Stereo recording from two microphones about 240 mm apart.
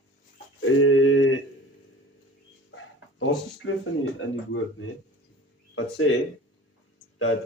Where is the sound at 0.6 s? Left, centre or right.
Left.